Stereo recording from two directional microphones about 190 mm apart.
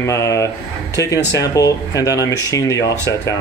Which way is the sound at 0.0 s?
15° left (ahead or behind).